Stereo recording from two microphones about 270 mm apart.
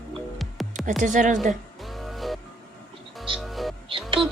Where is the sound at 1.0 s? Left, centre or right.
Right.